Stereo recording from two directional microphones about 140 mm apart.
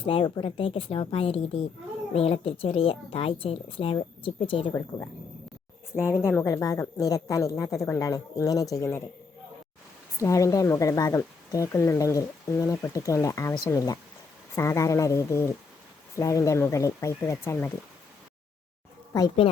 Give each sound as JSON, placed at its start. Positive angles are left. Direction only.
{"t": 0.0, "sound": "speech", "side_deg": 40}
{"t": 5.9, "sound": "speech", "side_deg": 20}
{"t": 10.2, "sound": "speech", "side_deg": 20}